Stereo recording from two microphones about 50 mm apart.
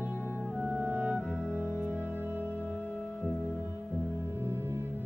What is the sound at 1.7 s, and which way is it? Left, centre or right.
Music, right.